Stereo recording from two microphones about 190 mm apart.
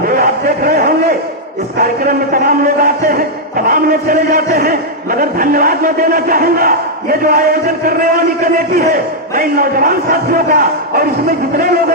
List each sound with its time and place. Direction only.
0.2 s a sound: 50° right (ahead or behind)
1.8 s speech: 50° right (ahead or behind)
9.3 s speech: 50° right (ahead or behind)